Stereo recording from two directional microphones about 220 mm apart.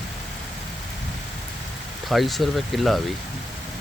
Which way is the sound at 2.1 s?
Centre (ahead or behind).